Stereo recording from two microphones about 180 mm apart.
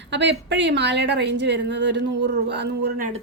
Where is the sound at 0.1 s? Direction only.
75° right (ahead or behind).